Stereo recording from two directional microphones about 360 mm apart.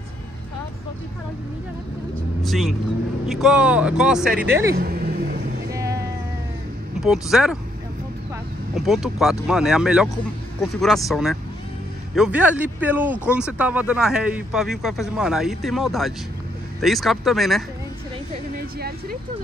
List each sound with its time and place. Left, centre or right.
2.4 s speech: centre
4.7 s vehicle: right
5.7 s music: centre
7.0 s speech: centre
8.7 s speech: centre
18.3 s speech: right